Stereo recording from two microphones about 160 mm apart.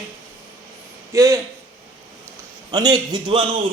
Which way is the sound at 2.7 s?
25° right (ahead or behind).